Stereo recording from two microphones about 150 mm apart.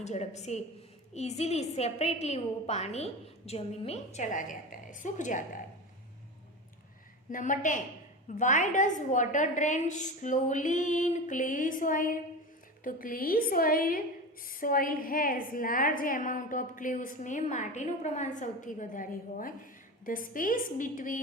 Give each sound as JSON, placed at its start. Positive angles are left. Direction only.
{"t": 0.0, "sound": "a woman's voice", "side_deg": 50}
{"t": 7.3, "sound": "a woman's voice", "side_deg": 60}